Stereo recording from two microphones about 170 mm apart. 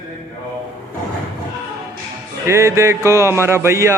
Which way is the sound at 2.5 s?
15° right (ahead or behind).